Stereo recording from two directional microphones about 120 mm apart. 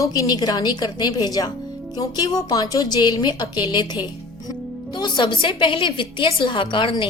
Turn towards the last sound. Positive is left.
turn(degrees=45)  # may be behind; listen again after turning